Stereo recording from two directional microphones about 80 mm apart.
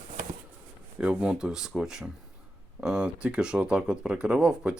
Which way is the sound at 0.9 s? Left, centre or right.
Centre.